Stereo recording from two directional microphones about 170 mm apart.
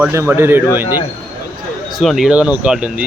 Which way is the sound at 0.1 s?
15° right (ahead or behind).